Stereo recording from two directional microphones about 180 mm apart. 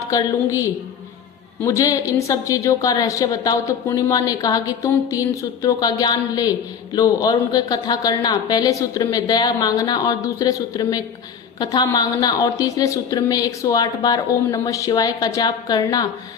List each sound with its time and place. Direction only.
0.1 s a woman's voice: 20° left (ahead or behind)